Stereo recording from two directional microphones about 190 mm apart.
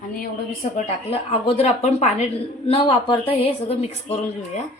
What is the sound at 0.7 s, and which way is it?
A woman's voice, 30° left (ahead or behind).